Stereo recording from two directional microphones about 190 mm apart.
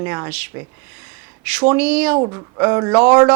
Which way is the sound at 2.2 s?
25° right (ahead or behind).